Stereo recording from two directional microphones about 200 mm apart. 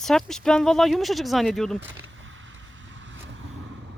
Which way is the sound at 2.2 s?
75° right (ahead or behind).